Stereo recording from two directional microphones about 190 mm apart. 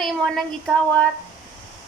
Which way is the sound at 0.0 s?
Centre (ahead or behind).